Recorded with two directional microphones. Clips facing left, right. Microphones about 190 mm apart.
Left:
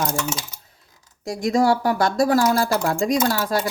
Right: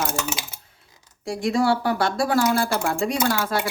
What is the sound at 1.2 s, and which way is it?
Speech, 40° left (ahead or behind).